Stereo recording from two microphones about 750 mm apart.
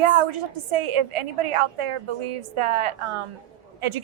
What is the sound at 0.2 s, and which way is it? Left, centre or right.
A woman's voice, right.